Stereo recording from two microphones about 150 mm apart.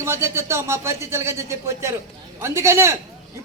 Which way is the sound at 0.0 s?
15° right (ahead or behind).